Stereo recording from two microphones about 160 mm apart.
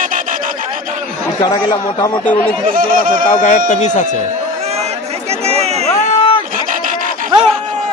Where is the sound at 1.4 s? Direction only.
25° left (ahead or behind).